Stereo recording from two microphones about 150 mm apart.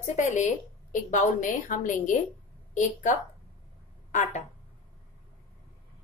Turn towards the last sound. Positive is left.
turn(degrees=55)  # may be behind; listen again after turning